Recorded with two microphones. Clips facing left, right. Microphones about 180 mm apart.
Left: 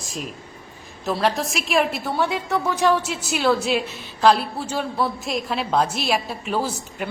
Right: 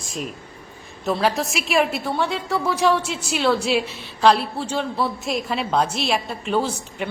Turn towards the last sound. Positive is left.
turn(degrees=5)  # may be behind; listen again after turning